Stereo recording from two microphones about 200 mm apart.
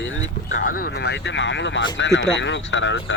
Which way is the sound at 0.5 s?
45° left (ahead or behind).